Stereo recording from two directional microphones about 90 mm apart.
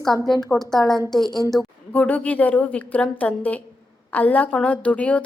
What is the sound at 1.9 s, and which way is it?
A woman's voice, 20° left (ahead or behind).